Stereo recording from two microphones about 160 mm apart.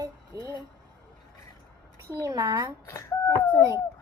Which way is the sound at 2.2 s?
25° right (ahead or behind).